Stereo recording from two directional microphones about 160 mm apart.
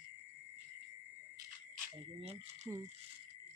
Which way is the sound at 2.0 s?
40° right (ahead or behind).